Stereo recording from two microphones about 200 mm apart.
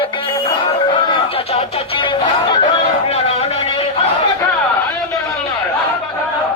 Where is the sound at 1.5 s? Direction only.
25° left (ahead or behind).